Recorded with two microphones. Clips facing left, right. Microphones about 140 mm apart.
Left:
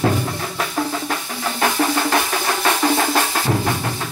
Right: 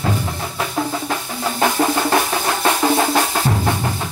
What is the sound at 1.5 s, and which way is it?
Music, 15° right (ahead or behind).